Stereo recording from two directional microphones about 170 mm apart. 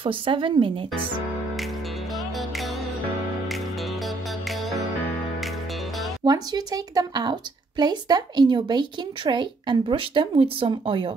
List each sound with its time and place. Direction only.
0.0 s speech: 30° right (ahead or behind)
2.1 s music: centre (ahead or behind)
4.0 s music: centre (ahead or behind)
6.2 s speech: 25° right (ahead or behind)